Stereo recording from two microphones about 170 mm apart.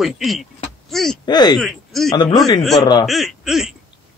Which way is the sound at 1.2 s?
25° left (ahead or behind).